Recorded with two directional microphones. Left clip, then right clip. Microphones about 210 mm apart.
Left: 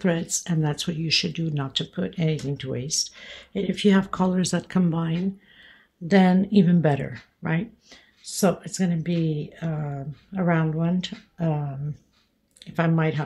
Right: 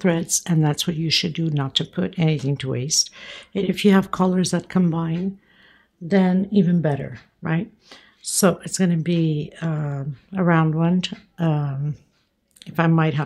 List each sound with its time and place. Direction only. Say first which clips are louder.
0.0 s speech: right 4 dB; 20° right (ahead or behind)
8.2 s speech: right 4 dB; 30° right (ahead or behind)